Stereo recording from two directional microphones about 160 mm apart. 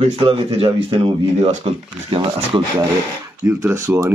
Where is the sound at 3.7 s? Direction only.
15° right (ahead or behind).